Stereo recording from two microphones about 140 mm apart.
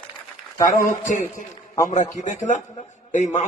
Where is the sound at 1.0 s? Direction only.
65° left (ahead or behind).